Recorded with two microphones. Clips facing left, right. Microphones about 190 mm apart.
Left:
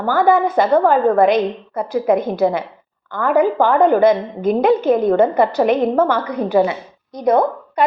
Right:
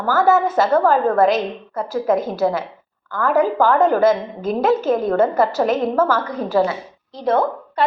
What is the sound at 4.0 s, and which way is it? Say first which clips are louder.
A woman's voice: left 2 dB; 5° right (ahead or behind).